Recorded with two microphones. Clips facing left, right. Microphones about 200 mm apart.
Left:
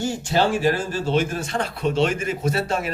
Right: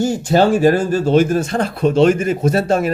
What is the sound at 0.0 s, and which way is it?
Speech, 45° right (ahead or behind).